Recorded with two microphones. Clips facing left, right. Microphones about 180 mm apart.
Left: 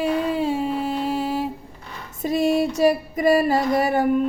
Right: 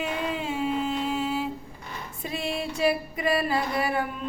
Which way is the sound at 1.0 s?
40° left (ahead or behind).